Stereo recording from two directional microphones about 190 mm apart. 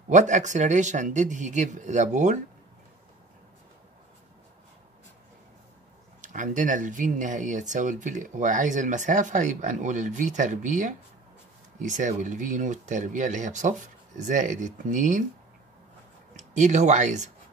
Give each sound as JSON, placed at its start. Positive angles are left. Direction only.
{"t": 0.1, "sound": "speech", "side_deg": -40}
{"t": 6.2, "sound": "speech", "side_deg": -40}
{"t": 16.3, "sound": "speech", "side_deg": -40}